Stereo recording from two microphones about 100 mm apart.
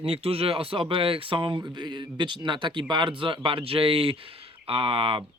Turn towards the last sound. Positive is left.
turn(degrees=-65)  # may be behind; listen again after turning